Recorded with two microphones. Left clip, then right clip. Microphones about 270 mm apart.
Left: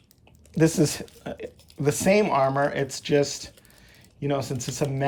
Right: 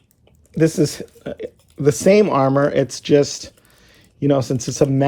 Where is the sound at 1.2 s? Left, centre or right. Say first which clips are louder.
Right 6 dB; centre.